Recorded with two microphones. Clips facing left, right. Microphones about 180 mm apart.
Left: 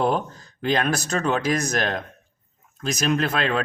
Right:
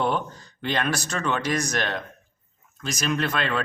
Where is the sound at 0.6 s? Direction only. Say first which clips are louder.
Left 4 dB; 40° left (ahead or behind).